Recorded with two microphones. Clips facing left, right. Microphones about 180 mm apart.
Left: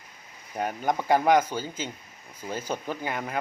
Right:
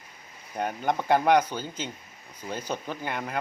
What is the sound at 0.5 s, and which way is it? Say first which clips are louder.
Speech: even; 10° left (ahead or behind).